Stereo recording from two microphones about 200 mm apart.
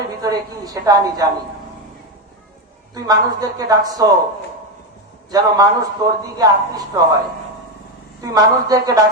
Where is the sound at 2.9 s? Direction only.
20° right (ahead or behind).